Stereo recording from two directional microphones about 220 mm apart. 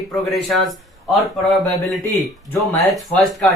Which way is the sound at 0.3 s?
Centre (ahead or behind).